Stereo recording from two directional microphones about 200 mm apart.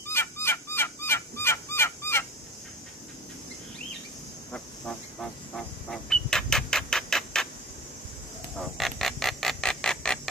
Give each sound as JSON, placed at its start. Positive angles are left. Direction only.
{"t": 0.0, "sound": "fowl", "side_deg": 10}
{"t": 4.5, "sound": "frog", "side_deg": 5}
{"t": 8.5, "sound": "a sound", "side_deg": 0}